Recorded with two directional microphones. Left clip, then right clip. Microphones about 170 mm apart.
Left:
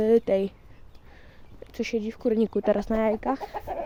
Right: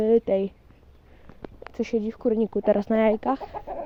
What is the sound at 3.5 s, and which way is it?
Chicken, 40° right (ahead or behind).